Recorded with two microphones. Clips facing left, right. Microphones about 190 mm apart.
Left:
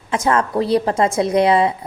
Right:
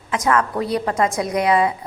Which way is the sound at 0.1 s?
30° left (ahead or behind).